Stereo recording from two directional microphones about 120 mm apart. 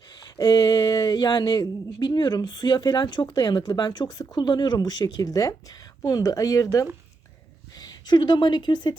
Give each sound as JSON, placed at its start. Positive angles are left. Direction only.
{"t": 0.3, "sound": "a woman's voice", "side_deg": 35}